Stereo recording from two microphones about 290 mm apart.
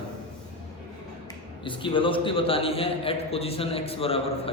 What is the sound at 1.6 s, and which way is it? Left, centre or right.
A man's voice, centre.